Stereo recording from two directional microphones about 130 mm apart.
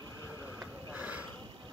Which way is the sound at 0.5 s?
10° right (ahead or behind).